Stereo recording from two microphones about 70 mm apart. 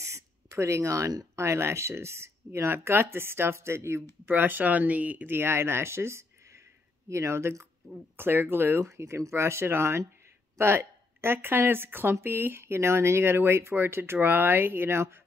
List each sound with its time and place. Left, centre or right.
0.0 s a sound: right
1.3 s speech: right
4.3 s speech: right
8.8 s speech: right